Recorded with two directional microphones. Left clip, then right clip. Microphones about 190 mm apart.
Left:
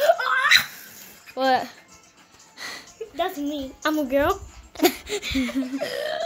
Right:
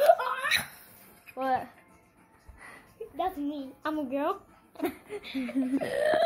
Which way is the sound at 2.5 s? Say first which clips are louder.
Left 13 dB; 45° left (ahead or behind).